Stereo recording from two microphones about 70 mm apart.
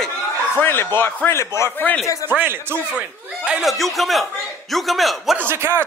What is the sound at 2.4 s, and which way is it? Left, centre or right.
Speech, right.